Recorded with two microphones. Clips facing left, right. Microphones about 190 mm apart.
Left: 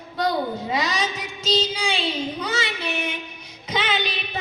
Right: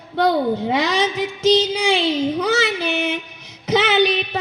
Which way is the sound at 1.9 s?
65° right (ahead or behind).